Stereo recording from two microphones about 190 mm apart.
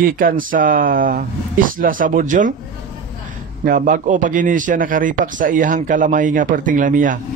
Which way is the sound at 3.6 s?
45° right (ahead or behind).